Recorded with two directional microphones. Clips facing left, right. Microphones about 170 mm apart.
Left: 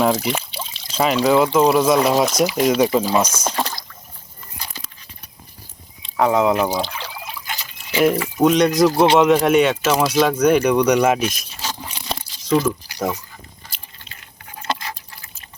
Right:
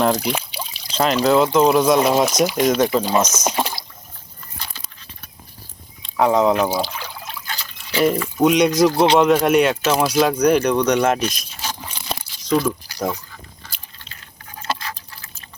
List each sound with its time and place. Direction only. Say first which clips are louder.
0.0 s speech: even; centre (ahead or behind)
3.3 s speech: right 1 dB; 10° right (ahead or behind)
6.0 s speech: right 1 dB; centre (ahead or behind)
7.3 s trickle: left 1 dB; 15° left (ahead or behind)
8.0 s speech: left 1 dB; 5° left (ahead or behind)
14.7 s a sound: left 1 dB; 5° right (ahead or behind)